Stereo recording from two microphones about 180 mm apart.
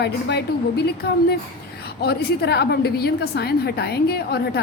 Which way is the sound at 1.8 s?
65° left (ahead or behind).